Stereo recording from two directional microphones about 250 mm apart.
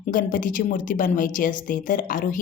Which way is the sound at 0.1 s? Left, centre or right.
Left.